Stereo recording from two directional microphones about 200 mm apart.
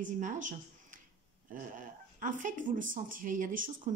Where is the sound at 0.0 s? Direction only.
40° right (ahead or behind).